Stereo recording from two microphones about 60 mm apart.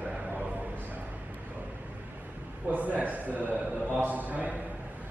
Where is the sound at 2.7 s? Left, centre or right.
Right.